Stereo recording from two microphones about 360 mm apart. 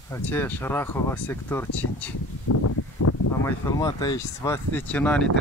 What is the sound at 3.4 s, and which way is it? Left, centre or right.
Speech, centre.